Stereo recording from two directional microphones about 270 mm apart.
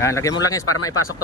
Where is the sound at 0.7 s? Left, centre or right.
Left.